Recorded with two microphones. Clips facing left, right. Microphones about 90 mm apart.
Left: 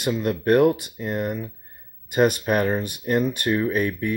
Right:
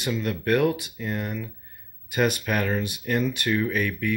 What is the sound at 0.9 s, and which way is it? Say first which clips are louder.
Speech: left 4 dB; 35° left (ahead or behind).